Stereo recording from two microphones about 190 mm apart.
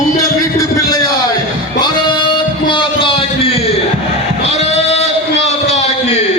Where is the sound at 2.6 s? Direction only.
25° left (ahead or behind).